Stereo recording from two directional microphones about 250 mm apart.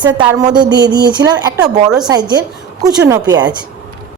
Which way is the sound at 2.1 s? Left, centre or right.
Centre.